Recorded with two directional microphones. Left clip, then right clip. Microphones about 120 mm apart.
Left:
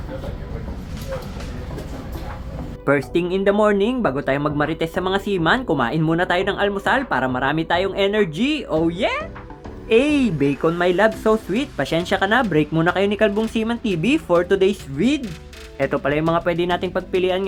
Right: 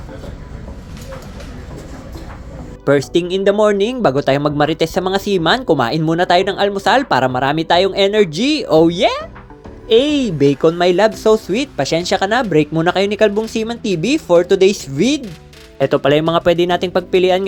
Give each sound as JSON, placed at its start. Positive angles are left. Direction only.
{"t": 2.8, "sound": "speech", "side_deg": -20}
{"t": 4.0, "sound": "speech", "side_deg": -35}
{"t": 8.7, "sound": "speech", "side_deg": -45}
{"t": 9.9, "sound": "speech", "side_deg": -15}
{"t": 10.3, "sound": "speech", "side_deg": -25}
{"t": 15.0, "sound": "speech", "side_deg": -30}